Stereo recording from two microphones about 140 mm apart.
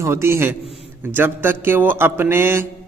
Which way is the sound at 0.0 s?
20° right (ahead or behind).